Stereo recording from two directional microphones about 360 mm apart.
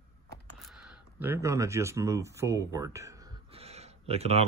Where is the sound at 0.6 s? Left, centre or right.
Centre.